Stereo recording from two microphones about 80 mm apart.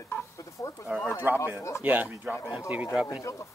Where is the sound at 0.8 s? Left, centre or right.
Centre.